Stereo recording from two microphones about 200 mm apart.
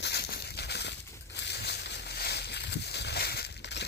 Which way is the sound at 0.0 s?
55° left (ahead or behind).